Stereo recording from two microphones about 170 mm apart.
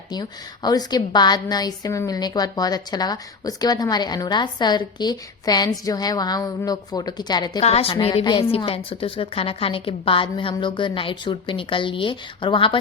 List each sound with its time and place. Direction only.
0.1 s a woman's voice: 25° left (ahead or behind)
7.6 s a woman's voice: 35° left (ahead or behind)